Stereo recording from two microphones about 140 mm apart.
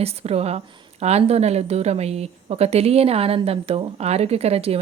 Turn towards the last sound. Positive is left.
turn(degrees=-45)  # may be behind; listen again after turning